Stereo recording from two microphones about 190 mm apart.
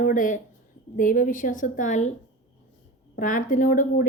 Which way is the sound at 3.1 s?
45° left (ahead or behind).